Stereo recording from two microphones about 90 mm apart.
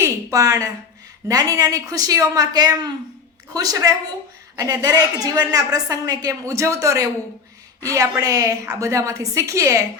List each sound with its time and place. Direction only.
0.0 s a sound: 40° right (ahead or behind)
1.3 s a woman's voice: 40° right (ahead or behind)
8.2 s a woman's voice: 40° right (ahead or behind)